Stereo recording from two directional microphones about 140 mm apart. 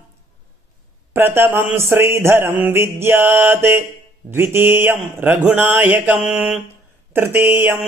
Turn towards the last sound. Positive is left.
turn(degrees=-15)  # may be behind; listen again after turning